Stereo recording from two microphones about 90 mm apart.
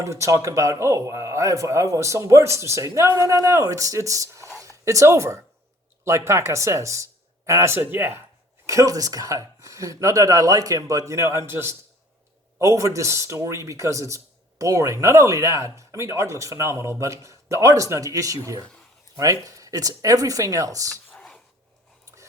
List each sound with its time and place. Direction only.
0.0 s speech: 35° right (ahead or behind)
8.6 s speech: 35° right (ahead or behind)
21.1 s a sound: 10° left (ahead or behind)